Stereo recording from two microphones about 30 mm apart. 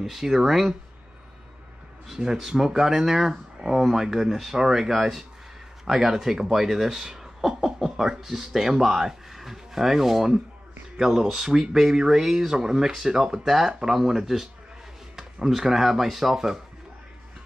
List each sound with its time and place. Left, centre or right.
0.0 s speech: centre
2.1 s speech: centre
7.4 s chuckle: centre
8.0 s speech: centre
13.9 s speech: centre
15.1 s a sound: centre
15.5 s speech: centre